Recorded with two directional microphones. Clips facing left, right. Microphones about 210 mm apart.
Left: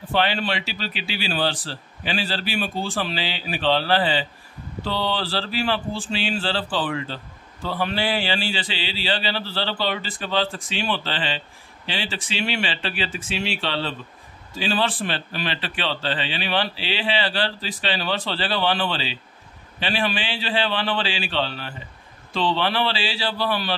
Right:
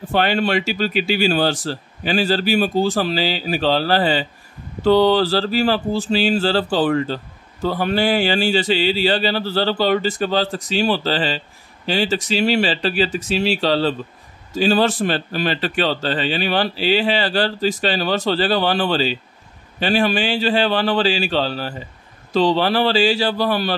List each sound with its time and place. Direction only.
0.1 s a man's voice: 45° right (ahead or behind)